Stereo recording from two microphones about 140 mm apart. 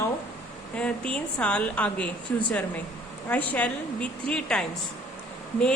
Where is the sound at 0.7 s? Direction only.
10° left (ahead or behind).